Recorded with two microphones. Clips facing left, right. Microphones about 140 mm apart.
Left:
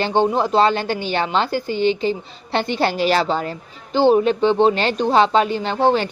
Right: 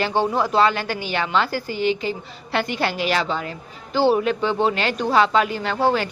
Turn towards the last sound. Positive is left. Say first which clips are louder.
# left 3 dB
turn(degrees=25)  # may be behind; listen again after turning